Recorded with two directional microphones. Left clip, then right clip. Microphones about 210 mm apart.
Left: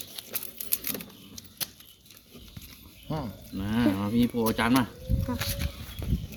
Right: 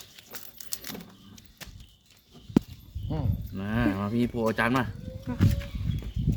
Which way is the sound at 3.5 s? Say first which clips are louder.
Left 1 dB; 45° right (ahead or behind).